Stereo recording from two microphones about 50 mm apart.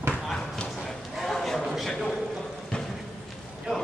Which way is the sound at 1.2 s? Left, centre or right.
Centre.